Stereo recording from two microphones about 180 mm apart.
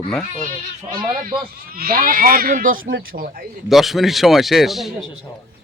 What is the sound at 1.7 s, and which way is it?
Speech, 55° right (ahead or behind).